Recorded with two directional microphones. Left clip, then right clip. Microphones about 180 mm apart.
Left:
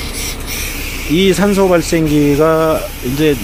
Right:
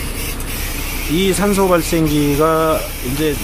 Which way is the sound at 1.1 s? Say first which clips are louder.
Left 4 dB; 20° left (ahead or behind).